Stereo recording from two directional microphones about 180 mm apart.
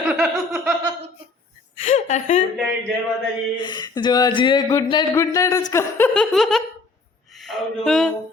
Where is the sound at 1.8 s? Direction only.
45° left (ahead or behind).